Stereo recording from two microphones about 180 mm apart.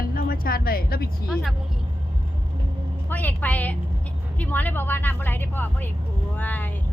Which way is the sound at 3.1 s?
10° left (ahead or behind).